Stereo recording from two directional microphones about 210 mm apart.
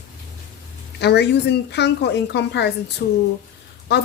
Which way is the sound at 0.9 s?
55° left (ahead or behind).